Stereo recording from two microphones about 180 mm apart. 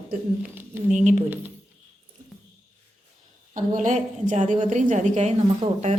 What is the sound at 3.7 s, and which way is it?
Speech, 40° right (ahead or behind).